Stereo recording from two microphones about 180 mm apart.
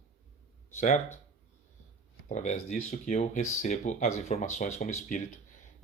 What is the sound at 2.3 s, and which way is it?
Speech, 45° left (ahead or behind).